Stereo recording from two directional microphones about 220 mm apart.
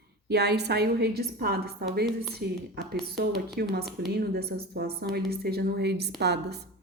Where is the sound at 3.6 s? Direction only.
45° right (ahead or behind).